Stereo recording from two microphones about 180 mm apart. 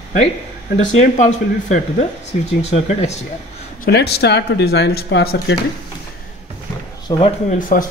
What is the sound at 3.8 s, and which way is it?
Speech, 65° left (ahead or behind).